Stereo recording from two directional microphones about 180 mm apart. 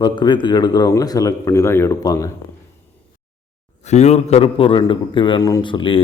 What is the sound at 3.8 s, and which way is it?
A man's voice, 40° left (ahead or behind).